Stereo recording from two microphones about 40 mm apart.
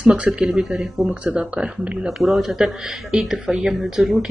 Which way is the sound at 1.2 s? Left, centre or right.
Right.